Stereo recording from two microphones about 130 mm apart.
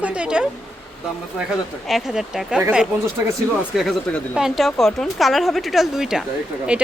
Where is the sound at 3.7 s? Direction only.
Centre (ahead or behind).